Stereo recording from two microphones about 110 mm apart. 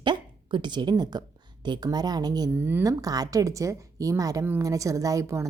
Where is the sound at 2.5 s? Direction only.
20° right (ahead or behind).